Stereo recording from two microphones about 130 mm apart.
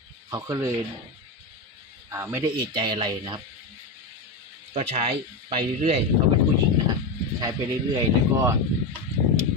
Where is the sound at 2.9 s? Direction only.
40° right (ahead or behind).